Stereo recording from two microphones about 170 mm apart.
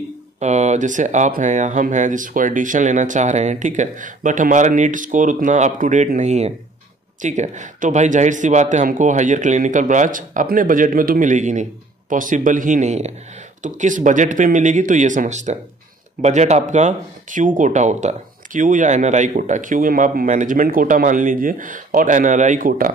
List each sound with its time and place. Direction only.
0.4 s speech: 45° right (ahead or behind)